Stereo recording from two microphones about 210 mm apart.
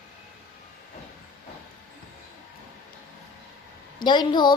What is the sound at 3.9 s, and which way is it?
Speech, 20° left (ahead or behind).